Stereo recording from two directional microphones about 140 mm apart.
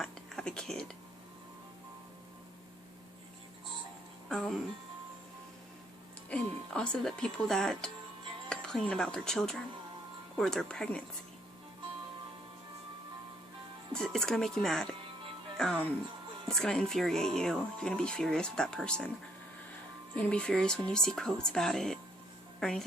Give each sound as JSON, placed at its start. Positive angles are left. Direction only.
{"t": 0.0, "sound": "whispering", "side_deg": 5}
{"t": 4.3, "sound": "speech", "side_deg": 5}
{"t": 6.3, "sound": "speech", "side_deg": 5}
{"t": 13.9, "sound": "speech", "side_deg": 5}
{"t": 20.1, "sound": "speech", "side_deg": 5}